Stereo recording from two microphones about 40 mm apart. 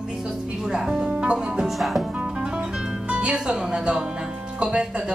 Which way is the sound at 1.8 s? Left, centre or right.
Centre.